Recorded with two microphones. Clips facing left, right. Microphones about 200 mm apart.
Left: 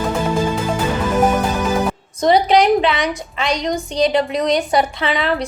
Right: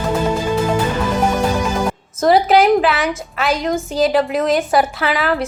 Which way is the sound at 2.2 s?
5° right (ahead or behind).